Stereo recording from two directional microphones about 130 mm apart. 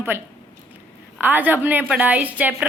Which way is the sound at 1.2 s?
15° right (ahead or behind).